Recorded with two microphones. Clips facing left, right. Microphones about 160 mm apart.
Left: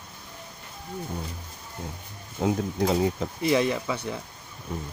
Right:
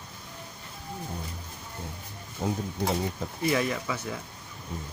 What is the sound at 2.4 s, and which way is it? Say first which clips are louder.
Speech: left 5 dB; 90° left.